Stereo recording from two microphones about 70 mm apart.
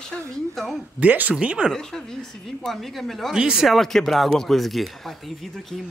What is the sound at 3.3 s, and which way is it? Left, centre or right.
Speech, centre.